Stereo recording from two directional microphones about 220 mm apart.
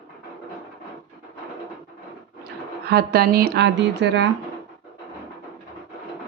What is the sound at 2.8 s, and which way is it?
Speech, 45° right (ahead or behind).